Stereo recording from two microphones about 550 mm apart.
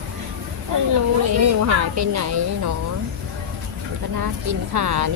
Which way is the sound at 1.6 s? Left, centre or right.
Right.